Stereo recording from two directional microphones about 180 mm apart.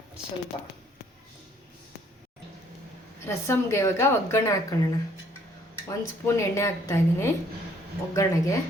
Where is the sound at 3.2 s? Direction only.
15° left (ahead or behind).